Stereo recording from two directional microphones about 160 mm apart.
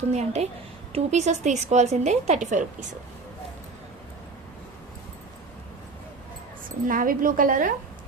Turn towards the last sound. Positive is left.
turn(degrees=-55)  # may be behind; listen again after turning